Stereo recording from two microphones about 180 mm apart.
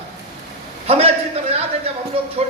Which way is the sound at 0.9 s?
35° right (ahead or behind).